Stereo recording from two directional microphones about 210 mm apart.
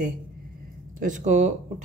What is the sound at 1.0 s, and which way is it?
Speech, 35° right (ahead or behind).